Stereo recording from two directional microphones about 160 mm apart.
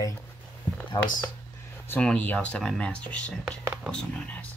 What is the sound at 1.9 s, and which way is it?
Speech, 10° left (ahead or behind).